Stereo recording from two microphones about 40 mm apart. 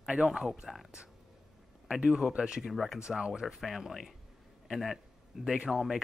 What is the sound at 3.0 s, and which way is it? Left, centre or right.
Speech, right.